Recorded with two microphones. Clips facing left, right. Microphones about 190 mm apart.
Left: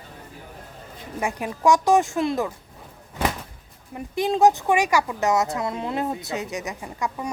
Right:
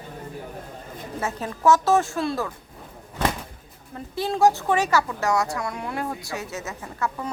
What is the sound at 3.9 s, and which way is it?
Speech, 15° left (ahead or behind).